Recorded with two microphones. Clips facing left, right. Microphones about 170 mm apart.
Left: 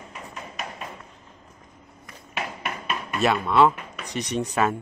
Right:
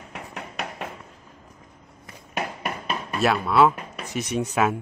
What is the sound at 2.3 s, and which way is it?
Drum, 35° right (ahead or behind).